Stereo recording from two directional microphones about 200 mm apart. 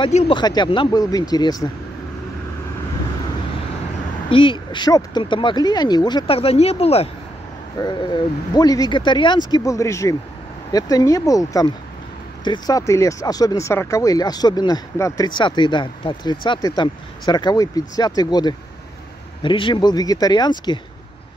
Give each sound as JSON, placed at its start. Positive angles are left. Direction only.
{"t": 0.0, "sound": "speech", "side_deg": 25}
{"t": 4.3, "sound": "speech", "side_deg": 25}